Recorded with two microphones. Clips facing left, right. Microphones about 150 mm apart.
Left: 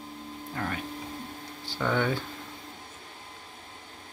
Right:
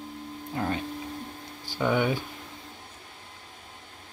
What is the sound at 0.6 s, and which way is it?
Music, 20° right (ahead or behind).